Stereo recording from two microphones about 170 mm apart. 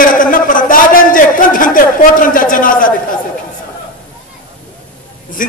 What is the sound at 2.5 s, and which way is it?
Speech, 55° left (ahead or behind).